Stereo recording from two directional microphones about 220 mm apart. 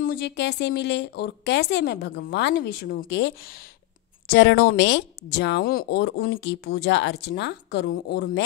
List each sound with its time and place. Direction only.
0.0 s speech: 45° left (ahead or behind)